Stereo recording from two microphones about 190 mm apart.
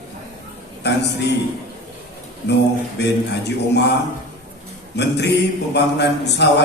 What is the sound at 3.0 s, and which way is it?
Speech, 65° left (ahead or behind).